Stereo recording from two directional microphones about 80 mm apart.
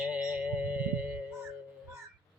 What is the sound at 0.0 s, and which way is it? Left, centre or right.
Music, centre.